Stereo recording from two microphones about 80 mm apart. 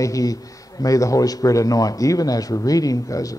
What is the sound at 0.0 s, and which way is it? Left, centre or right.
A man's voice, left.